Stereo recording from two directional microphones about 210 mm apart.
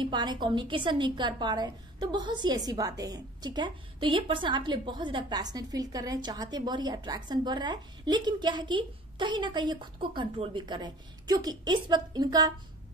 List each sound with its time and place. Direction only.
0.0 s speech: 20° right (ahead or behind)